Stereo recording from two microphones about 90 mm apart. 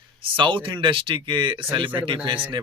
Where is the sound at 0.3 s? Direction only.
65° right (ahead or behind).